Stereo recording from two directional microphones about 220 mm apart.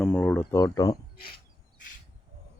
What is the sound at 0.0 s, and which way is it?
Insect, 5° left (ahead or behind).